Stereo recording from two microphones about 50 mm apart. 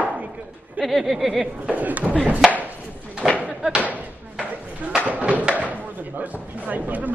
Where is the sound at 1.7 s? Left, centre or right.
Right.